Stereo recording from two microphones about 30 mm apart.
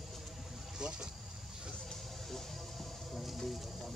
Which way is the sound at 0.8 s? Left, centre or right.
Right.